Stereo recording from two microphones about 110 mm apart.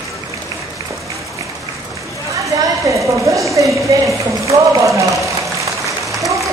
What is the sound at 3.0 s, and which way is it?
Speech, 30° right (ahead or behind).